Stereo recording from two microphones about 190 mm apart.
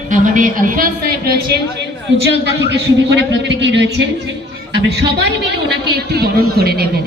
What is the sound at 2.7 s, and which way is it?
A man's voice, 70° right (ahead or behind).